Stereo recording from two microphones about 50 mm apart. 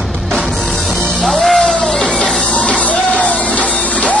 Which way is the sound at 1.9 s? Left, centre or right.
Centre.